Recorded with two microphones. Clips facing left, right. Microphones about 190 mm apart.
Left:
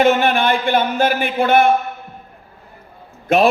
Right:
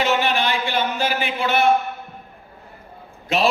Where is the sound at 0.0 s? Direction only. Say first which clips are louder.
Left 6 dB; 55° left (ahead or behind).